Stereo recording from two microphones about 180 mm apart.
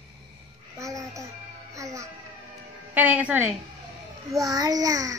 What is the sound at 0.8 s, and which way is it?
A child's voice, 15° right (ahead or behind).